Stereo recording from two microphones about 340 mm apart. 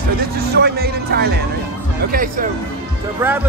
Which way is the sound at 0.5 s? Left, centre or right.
Right.